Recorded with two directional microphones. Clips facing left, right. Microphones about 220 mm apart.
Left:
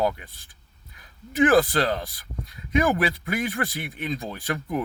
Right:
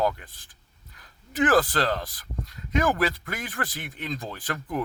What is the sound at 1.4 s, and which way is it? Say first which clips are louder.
Speech: left 3 dB; 15° left (ahead or behind).